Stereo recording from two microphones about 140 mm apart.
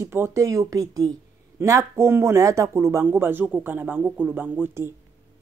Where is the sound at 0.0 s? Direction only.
20° right (ahead or behind).